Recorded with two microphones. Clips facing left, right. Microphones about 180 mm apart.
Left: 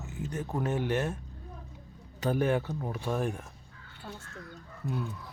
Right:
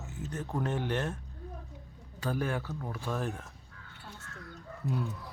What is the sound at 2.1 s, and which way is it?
Speech, 20° left (ahead or behind).